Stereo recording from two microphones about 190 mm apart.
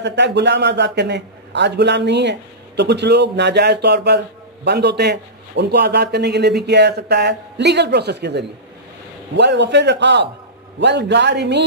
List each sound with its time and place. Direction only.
0.0 s a man's voice: 65° right (ahead or behind)